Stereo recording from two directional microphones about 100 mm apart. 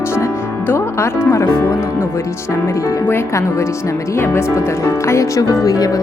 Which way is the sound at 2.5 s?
30° left (ahead or behind).